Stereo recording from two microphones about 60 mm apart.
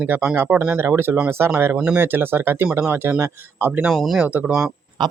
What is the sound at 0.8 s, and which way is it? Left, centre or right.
Speech, right.